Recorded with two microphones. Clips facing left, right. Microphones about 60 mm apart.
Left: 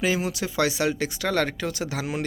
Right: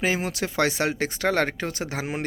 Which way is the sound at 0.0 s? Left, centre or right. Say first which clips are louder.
Even; right.